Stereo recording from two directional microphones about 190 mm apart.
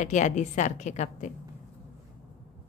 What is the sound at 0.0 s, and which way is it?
A woman's voice, 40° left (ahead or behind).